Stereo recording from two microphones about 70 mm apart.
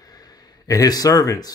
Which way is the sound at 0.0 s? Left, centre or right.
Left.